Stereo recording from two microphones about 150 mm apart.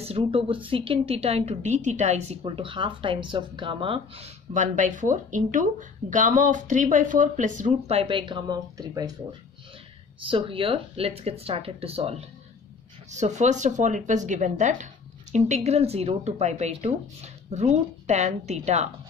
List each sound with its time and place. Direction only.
0.0 s a woman's voice: 40° right (ahead or behind)
4.6 s speech: 60° right (ahead or behind)
8.0 s a woman's voice: 30° right (ahead or behind)
10.3 s a woman's voice: 35° right (ahead or behind)